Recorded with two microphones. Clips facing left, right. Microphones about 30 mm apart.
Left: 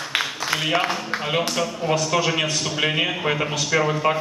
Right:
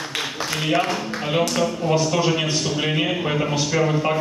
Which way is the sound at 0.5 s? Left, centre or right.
Centre.